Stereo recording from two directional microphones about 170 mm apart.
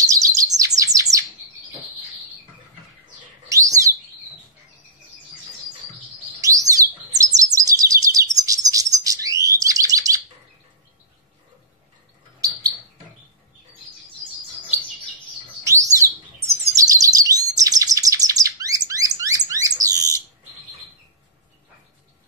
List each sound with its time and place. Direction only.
0.0 s bird: 20° right (ahead or behind)
3.4 s bird: 20° right (ahead or behind)
6.4 s bird: 20° right (ahead or behind)
15.6 s bird: 20° right (ahead or behind)